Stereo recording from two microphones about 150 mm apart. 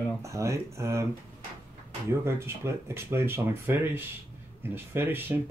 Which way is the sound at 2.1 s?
20° right (ahead or behind).